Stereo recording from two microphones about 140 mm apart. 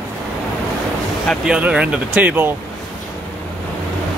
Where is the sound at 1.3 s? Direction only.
10° right (ahead or behind).